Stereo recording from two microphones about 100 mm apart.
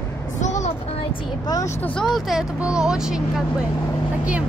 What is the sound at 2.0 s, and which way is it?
Speech, centre (ahead or behind).